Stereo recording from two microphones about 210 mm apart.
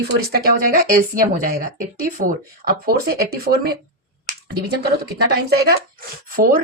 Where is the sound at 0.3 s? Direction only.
45° right (ahead or behind).